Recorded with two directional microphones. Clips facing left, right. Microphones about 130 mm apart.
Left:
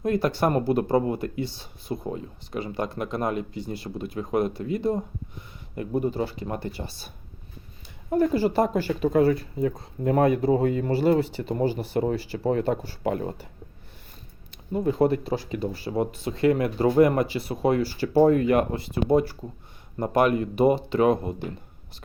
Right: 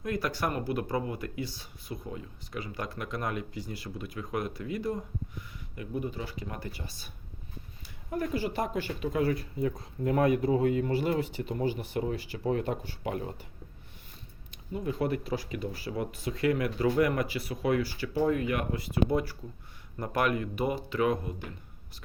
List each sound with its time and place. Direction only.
0.0 s speech: 30° left (ahead or behind)
5.7 s speech: 40° left (ahead or behind)
8.1 s speech: 35° left (ahead or behind)
14.7 s speech: 35° left (ahead or behind)